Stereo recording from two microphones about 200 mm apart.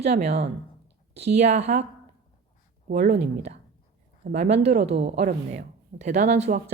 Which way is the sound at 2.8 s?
50° right (ahead or behind).